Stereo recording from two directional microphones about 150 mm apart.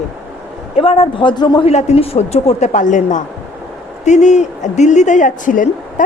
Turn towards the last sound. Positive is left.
turn(degrees=60)  # may be behind; listen again after turning